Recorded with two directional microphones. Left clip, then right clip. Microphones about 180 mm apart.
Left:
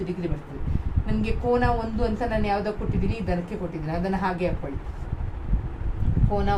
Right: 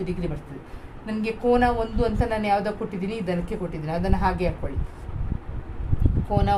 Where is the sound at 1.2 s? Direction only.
45° right (ahead or behind).